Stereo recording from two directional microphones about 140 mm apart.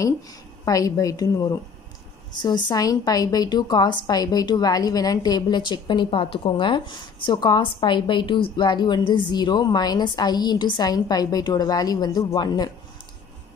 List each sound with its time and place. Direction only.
0.7 s a woman's voice: 25° left (ahead or behind)